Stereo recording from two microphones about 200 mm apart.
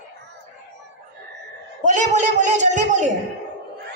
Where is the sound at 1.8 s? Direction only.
35° right (ahead or behind).